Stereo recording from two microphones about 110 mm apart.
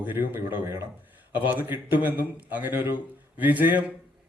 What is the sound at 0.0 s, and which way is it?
A man's voice, 15° right (ahead or behind).